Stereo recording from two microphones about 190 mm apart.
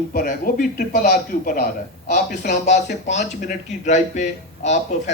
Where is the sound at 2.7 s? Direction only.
65° left (ahead or behind).